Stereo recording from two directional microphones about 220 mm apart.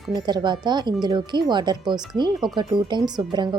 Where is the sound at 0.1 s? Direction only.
20° right (ahead or behind).